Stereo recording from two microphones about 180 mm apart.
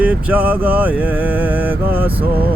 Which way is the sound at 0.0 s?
10° right (ahead or behind).